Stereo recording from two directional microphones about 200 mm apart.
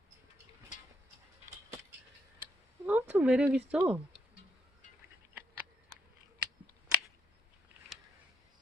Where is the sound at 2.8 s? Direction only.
10° right (ahead or behind).